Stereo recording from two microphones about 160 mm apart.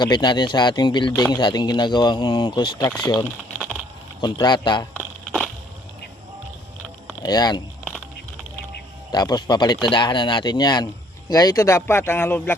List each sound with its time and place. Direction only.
0.0 s speech: 30° left (ahead or behind)
4.2 s speech: 25° left (ahead or behind)
4.9 s a sound: centre (ahead or behind)
7.2 s speech: 25° left (ahead or behind)
7.9 s a sound: 5° left (ahead or behind)
9.1 s speech: 25° left (ahead or behind)